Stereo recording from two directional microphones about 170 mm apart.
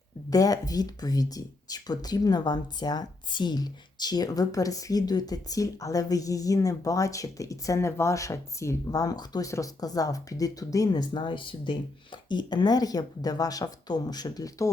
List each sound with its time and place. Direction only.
0.3 s speech: 20° left (ahead or behind)